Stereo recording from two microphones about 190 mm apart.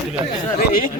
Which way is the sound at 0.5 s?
50° left (ahead or behind).